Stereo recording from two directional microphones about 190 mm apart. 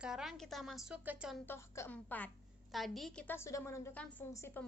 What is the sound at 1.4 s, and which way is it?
A woman's voice, 15° left (ahead or behind).